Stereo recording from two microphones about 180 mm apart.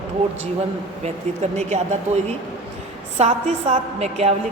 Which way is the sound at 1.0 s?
40° right (ahead or behind).